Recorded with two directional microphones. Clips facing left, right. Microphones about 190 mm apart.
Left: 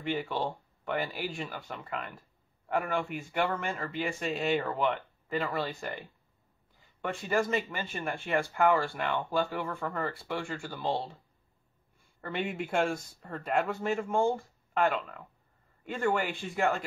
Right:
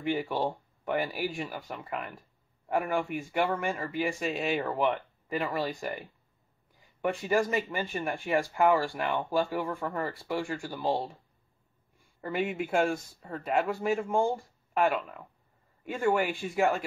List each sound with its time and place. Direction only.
0.0 s speech: 10° right (ahead or behind)
4.6 s speech: 15° right (ahead or behind)
7.0 s speech: 15° right (ahead or behind)
12.2 s speech: 5° right (ahead or behind)